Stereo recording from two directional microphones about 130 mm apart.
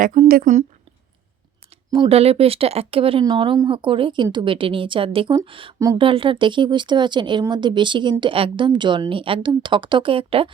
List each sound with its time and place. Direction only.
0.0 s a woman's voice: 85° right
2.0 s a woman's voice: 50° right (ahead or behind)